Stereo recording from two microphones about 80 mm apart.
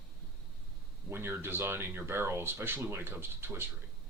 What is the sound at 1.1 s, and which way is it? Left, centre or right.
Speech, right.